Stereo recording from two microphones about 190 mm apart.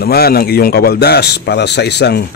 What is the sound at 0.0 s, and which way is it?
A man's voice, 55° left (ahead or behind).